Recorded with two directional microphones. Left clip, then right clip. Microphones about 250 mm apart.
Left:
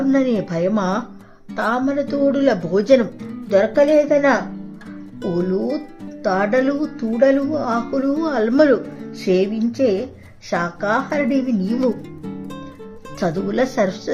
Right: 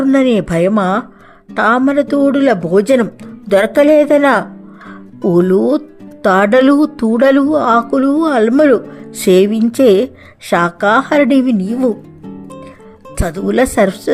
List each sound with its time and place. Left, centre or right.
0.1 s speech: right
9.2 s speech: right
13.1 s speech: right